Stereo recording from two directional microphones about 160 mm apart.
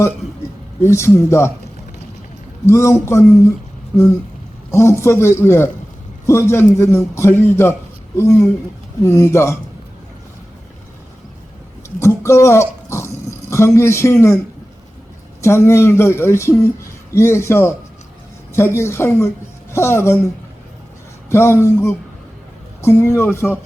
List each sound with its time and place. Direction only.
0.8 s speech: 15° left (ahead or behind)
2.6 s speech: 15° left (ahead or behind)
4.7 s speech: 15° left (ahead or behind)
11.9 s a sound: 15° left (ahead or behind)
13.5 s speech: 15° left (ahead or behind)
15.4 s speech: 15° left (ahead or behind)
21.2 s speech: 15° left (ahead or behind)